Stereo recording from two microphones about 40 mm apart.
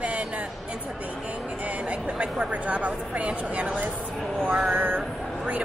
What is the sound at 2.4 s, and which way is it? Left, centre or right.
A woman's voice, right.